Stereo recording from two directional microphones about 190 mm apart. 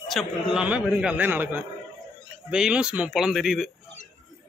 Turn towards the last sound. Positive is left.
turn(degrees=0)  # may be behind; listen again after turning